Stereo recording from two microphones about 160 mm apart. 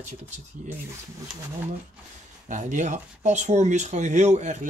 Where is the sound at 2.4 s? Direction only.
50° right (ahead or behind).